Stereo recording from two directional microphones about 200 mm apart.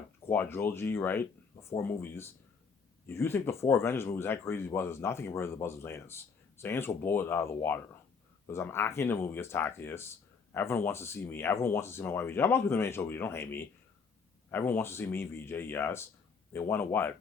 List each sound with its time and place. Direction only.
0.3 s speech: 10° left (ahead or behind)